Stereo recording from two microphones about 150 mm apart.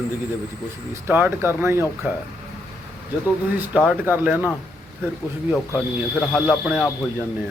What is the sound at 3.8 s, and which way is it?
Speech, 10° right (ahead or behind).